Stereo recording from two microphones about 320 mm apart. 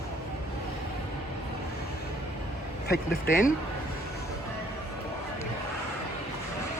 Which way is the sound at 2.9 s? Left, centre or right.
Left.